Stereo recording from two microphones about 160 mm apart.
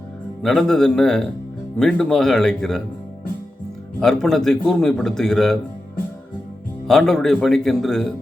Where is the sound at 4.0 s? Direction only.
5° left (ahead or behind).